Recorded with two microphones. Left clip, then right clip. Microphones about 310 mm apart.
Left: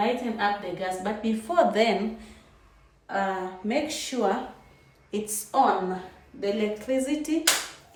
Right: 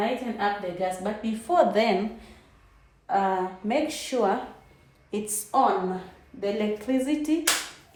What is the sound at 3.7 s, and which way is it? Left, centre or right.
A woman's voice, centre.